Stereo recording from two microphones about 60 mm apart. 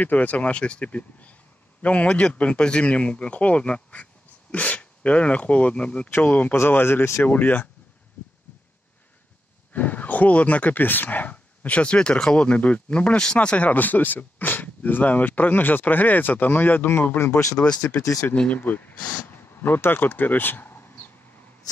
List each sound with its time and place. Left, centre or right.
0.0 s a man's voice: left
6.0 s speech: left
6.7 s speech: left
7.2 s speech: left
9.7 s speech: left
17.6 s speech: centre; by 20.8 s left